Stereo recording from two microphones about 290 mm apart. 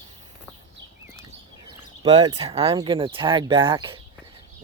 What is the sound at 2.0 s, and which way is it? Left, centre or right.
Speech, centre.